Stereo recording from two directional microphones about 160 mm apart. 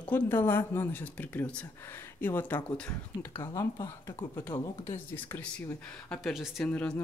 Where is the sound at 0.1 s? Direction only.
15° left (ahead or behind).